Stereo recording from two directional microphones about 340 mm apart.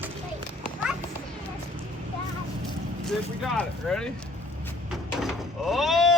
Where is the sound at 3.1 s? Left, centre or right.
Centre.